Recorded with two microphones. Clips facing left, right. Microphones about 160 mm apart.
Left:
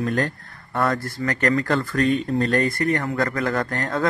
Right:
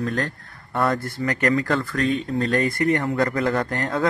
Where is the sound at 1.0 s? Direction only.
15° right (ahead or behind).